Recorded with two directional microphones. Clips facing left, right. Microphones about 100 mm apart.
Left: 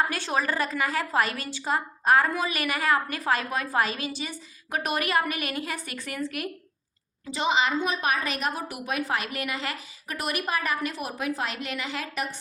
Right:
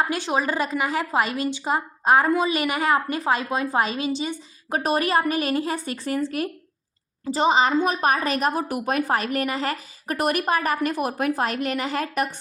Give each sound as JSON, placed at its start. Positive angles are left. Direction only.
{"t": 0.1, "sound": "a woman's voice", "side_deg": -20}